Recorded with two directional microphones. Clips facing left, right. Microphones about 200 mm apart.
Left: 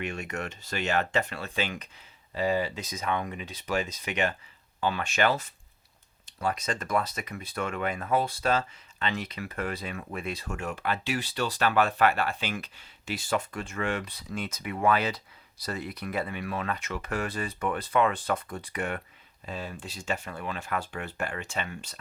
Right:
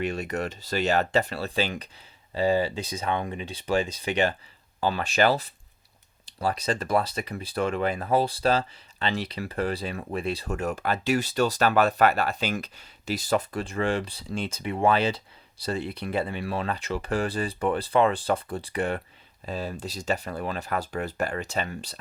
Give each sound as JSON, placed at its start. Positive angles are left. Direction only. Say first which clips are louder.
{"t": 0.0, "sound": "speech", "louder": "right 5 dB", "side_deg": -35}